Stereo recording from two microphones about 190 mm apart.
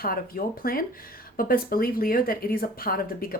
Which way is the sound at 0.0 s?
50° left (ahead or behind).